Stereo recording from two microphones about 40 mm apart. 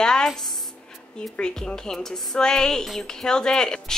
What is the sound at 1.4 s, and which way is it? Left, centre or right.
A woman's voice, centre.